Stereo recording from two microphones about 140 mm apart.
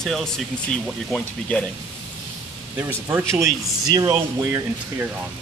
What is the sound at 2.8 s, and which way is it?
Speech, 15° right (ahead or behind).